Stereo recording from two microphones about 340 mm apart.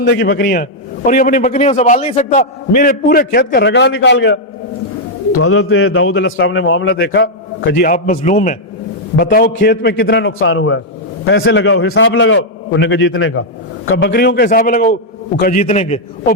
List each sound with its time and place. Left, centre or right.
0.0 s a man's voice: left